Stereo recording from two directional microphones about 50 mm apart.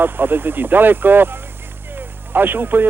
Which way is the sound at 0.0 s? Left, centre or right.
Right.